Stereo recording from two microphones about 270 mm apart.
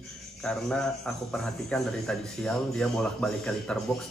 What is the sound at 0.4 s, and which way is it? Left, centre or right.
A man's voice, centre.